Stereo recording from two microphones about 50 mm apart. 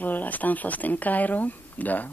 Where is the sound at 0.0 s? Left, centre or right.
Left.